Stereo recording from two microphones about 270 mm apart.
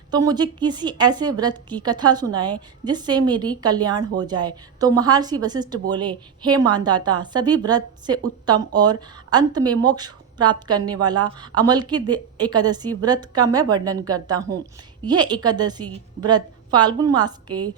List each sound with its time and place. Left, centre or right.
0.1 s a woman's voice: centre